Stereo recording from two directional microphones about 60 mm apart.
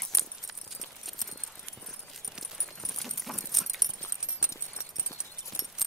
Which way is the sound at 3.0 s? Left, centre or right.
Centre.